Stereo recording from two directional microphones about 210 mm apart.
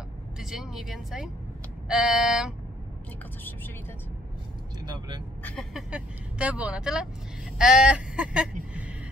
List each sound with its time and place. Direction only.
0.4 s speech: centre (ahead or behind)
4.8 s speech: 20° right (ahead or behind)
5.4 s speech: centre (ahead or behind)